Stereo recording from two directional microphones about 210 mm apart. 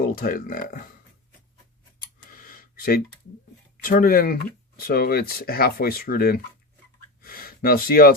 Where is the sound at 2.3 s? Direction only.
40° left (ahead or behind).